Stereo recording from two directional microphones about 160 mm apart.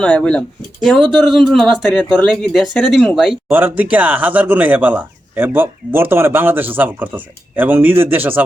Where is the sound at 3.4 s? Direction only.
10° right (ahead or behind).